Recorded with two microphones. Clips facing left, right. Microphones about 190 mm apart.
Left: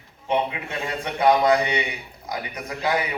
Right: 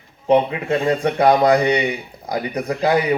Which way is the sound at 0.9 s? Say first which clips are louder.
Right 4 dB; 40° right (ahead or behind).